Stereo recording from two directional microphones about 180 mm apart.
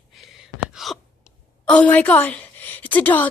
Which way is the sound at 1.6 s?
5° left (ahead or behind).